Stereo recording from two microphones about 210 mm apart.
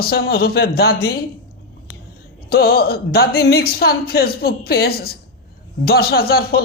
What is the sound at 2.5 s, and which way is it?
A man's voice, 45° left (ahead or behind).